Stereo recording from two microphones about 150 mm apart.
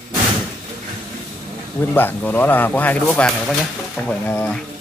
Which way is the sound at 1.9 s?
10° left (ahead or behind).